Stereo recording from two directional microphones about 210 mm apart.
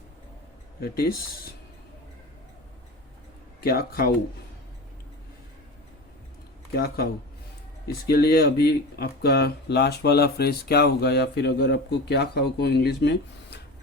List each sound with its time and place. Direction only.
0.8 s speech: 45° left (ahead or behind)
3.6 s speech: 45° left (ahead or behind)
6.7 s speech: 50° left (ahead or behind)